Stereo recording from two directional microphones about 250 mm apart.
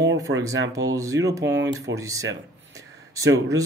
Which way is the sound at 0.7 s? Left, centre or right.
Centre.